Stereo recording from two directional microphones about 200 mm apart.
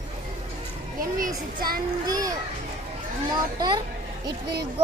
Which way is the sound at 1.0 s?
45° right (ahead or behind).